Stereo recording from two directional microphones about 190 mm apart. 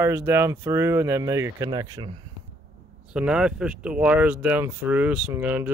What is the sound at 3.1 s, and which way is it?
Speech, 5° right (ahead or behind).